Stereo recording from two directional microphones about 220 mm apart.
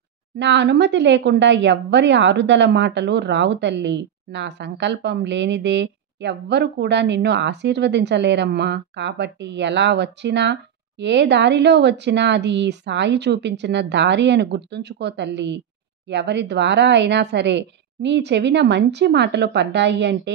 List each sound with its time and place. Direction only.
0.4 s a woman's voice: 55° right (ahead or behind)